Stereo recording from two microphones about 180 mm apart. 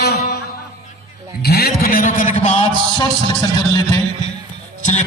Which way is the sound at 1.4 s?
60° left (ahead or behind).